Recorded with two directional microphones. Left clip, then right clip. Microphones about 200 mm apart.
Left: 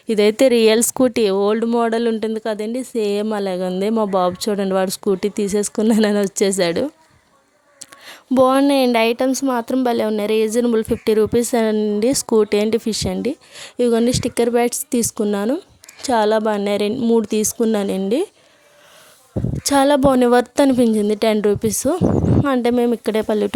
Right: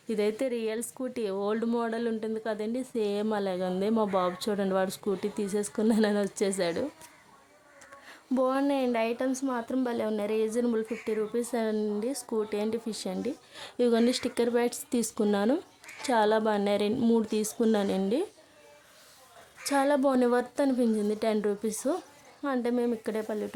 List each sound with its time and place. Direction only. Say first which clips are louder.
0.1 s a woman's voice: left 15 dB; 45° left (ahead or behind)
8.0 s a woman's voice: left 13 dB; 45° left (ahead or behind)
19.6 s a woman's voice: left 11 dB; 40° left (ahead or behind)